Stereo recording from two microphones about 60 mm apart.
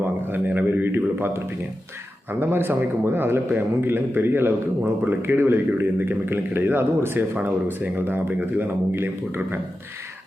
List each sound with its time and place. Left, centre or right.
0.0 s speech: right
2.4 s a man's voice: right